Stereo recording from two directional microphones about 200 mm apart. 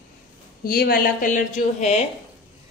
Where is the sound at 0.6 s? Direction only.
45° left (ahead or behind).